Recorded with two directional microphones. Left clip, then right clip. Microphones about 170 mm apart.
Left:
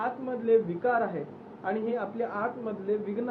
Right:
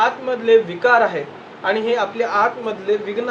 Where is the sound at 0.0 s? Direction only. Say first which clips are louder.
Right 13 dB; 10° right (ahead or behind).